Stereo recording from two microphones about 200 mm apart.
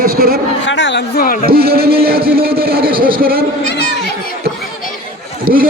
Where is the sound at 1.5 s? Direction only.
50° right (ahead or behind).